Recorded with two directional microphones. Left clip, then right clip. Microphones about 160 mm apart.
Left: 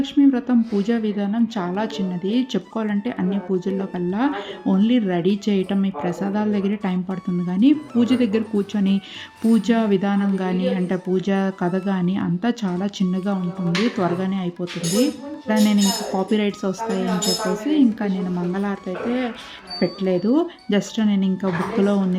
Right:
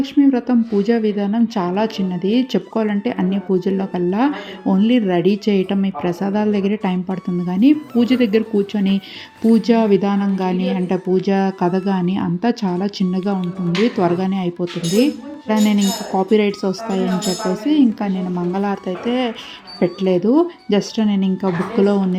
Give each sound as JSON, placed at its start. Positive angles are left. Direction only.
{"t": 0.0, "sound": "a woman's voice", "side_deg": -10}